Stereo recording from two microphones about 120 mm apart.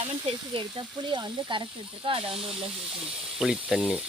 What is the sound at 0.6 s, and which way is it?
Speech, 40° right (ahead or behind).